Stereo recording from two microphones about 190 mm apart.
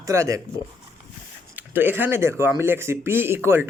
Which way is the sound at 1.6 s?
10° right (ahead or behind).